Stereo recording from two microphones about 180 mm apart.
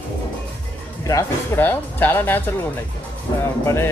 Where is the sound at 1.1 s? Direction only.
15° left (ahead or behind).